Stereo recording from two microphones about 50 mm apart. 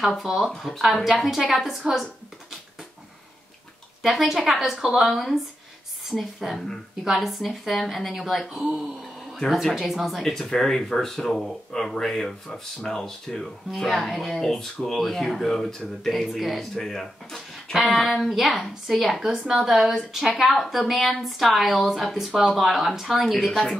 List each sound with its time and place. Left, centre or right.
0.0 s a woman's voice: centre
4.0 s a woman's voice: centre
5.0 s a woman's voice: centre
19.2 s a woman's voice: centre